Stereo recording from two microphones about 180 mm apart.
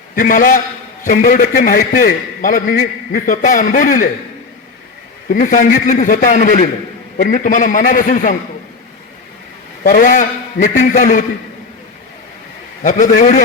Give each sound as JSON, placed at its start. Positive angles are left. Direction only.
{"t": 0.2, "sound": "a man's voice", "side_deg": 50}
{"t": 5.3, "sound": "a man's voice", "side_deg": 50}
{"t": 9.8, "sound": "a man's voice", "side_deg": 50}
{"t": 12.8, "sound": "a man's voice", "side_deg": 50}